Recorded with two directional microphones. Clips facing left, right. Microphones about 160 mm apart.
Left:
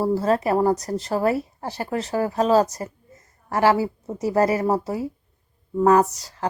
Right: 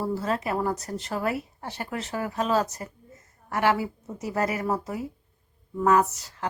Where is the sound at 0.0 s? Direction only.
40° left (ahead or behind).